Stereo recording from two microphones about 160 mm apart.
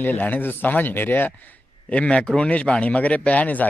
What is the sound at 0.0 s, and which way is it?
Speech, 10° left (ahead or behind).